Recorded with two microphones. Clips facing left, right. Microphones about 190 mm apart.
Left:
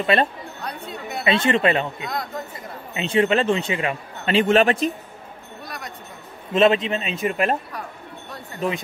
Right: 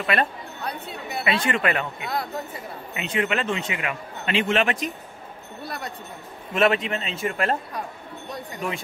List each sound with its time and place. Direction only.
0.0 s a man's voice: 25° left (ahead or behind)
0.7 s speech: 5° right (ahead or behind)
1.2 s a man's voice: 25° left (ahead or behind)
2.9 s a man's voice: 30° left (ahead or behind)
6.5 s a man's voice: 20° left (ahead or behind)
8.5 s a man's voice: 20° left (ahead or behind)